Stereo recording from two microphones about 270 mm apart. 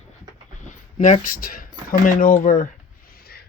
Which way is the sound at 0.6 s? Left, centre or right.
Left.